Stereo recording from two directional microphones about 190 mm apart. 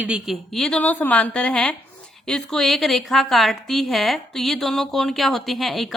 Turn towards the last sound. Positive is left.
turn(degrees=0)  # may be behind; listen again after turning